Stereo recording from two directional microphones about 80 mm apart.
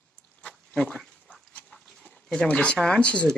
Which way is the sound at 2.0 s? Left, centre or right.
Centre.